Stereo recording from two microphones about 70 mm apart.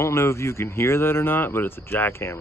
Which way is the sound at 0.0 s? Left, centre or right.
Left.